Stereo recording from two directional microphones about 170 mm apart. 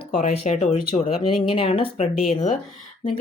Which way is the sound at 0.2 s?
40° left (ahead or behind).